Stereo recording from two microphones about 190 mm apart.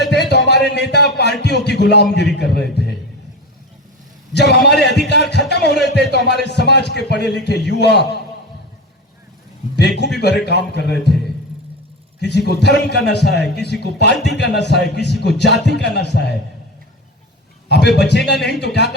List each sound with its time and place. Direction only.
0.0 s music: 60° left (ahead or behind)
4.4 s a man's voice: 60° left (ahead or behind)
9.7 s a man's voice: 60° left (ahead or behind)
12.2 s a man's voice: 60° left (ahead or behind)
17.7 s a man's voice: 60° left (ahead or behind)